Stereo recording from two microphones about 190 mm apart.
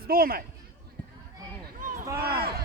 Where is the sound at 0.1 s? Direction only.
50° right (ahead or behind).